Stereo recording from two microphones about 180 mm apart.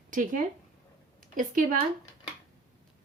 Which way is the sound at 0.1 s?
45° right (ahead or behind).